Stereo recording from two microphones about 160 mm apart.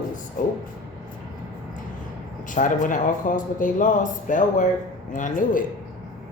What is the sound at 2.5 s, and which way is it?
A man's voice, 55° left (ahead or behind).